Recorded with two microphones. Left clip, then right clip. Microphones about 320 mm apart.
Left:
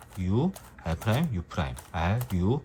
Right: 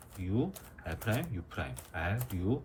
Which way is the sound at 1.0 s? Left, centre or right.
Centre.